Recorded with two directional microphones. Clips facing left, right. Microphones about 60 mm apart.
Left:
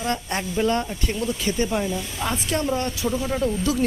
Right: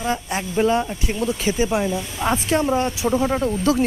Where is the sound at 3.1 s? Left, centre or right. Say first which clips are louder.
Right 4 dB; right.